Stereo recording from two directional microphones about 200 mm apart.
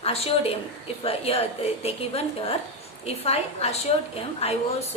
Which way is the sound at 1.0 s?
30° left (ahead or behind).